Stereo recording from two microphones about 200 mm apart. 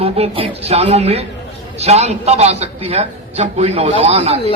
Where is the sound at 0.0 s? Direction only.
30° right (ahead or behind).